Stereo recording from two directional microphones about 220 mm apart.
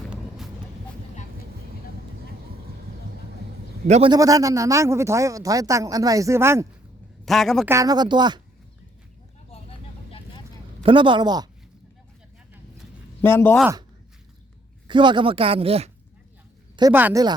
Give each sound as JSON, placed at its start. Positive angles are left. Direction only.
{"t": 0.1, "sound": "vehicle", "side_deg": 0}
{"t": 3.8, "sound": "speech", "side_deg": -30}
{"t": 4.1, "sound": "speech", "side_deg": -15}
{"t": 7.3, "sound": "a man's voice", "side_deg": 0}
{"t": 7.7, "sound": "speech", "side_deg": -15}
{"t": 9.5, "sound": "vehicle", "side_deg": 25}
{"t": 10.8, "sound": "speech", "side_deg": -20}
{"t": 13.2, "sound": "speech", "side_deg": 10}
{"t": 14.8, "sound": "speech", "side_deg": -20}
{"t": 16.7, "sound": "speech", "side_deg": -15}